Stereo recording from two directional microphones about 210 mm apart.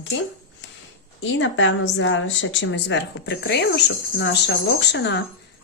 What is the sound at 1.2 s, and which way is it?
A woman's voice, 60° left (ahead or behind).